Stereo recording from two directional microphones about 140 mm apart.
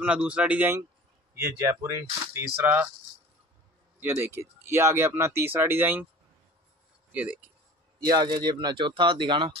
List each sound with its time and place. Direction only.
0.0 s speech: 10° right (ahead or behind)
4.0 s speech: 15° right (ahead or behind)
7.1 s speech: 10° right (ahead or behind)
8.1 s speech: 30° right (ahead or behind)